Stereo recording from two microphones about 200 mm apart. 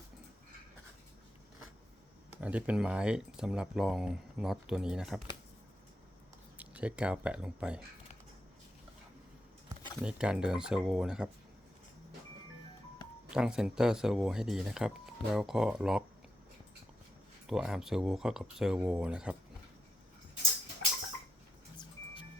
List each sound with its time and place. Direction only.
2.4 s speech: 5° right (ahead or behind)
6.6 s speech: 5° right (ahead or behind)
9.6 s speech: 5° right (ahead or behind)
13.3 s speech: 5° right (ahead or behind)
17.4 s speech: 5° right (ahead or behind)
21.8 s music: 20° left (ahead or behind)